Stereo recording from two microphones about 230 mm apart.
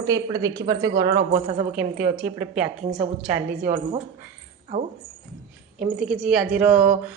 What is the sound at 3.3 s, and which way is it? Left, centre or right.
Speech, right.